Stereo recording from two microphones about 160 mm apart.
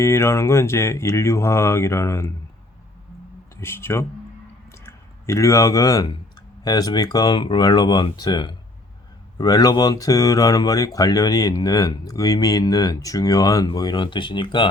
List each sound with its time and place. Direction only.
0.0 s speech: 15° left (ahead or behind)
3.6 s speech: 15° left (ahead or behind); by 14.7 s 30° left (ahead or behind)